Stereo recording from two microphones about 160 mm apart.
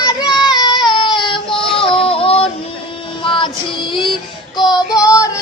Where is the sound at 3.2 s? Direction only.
30° left (ahead or behind).